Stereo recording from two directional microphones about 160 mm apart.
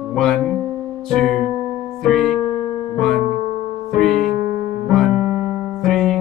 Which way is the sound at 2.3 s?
25° left (ahead or behind).